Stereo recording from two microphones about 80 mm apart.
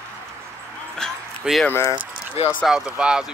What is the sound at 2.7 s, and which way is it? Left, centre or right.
Speech, centre.